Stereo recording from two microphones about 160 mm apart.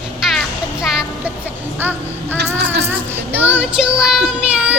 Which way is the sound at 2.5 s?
90° right.